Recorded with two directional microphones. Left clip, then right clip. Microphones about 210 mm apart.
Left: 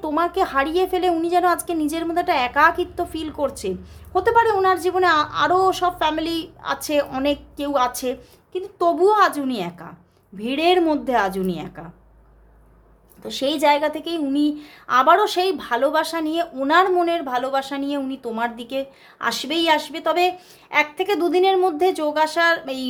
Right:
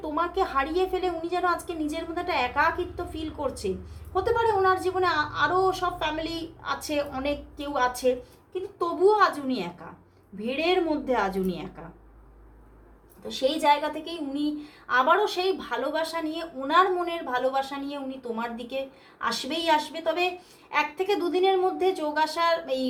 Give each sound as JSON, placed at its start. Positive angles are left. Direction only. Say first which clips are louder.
{"t": 0.0, "sound": "a woman's voice", "louder": "left 6 dB", "side_deg": 45}
{"t": 13.2, "sound": "a woman's voice", "louder": "left 4 dB", "side_deg": 50}